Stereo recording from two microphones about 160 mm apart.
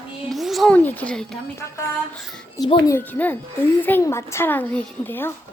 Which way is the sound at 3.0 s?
10° left (ahead or behind).